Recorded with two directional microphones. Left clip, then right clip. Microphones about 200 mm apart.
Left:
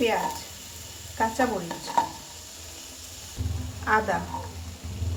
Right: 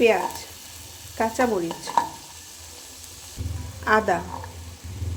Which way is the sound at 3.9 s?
40° right (ahead or behind).